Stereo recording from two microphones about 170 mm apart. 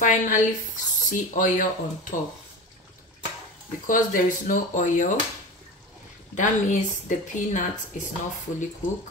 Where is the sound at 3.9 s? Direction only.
50° left (ahead or behind).